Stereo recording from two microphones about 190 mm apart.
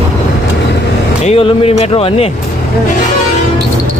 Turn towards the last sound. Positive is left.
turn(degrees=30)  # may be behind; listen again after turning